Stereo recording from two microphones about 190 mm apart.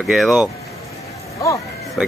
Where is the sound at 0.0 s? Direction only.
Centre (ahead or behind).